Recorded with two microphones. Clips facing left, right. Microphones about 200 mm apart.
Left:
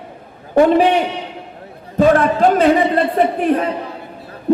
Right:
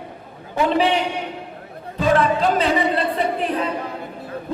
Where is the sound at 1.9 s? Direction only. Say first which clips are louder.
Left 5 dB; 50° left (ahead or behind).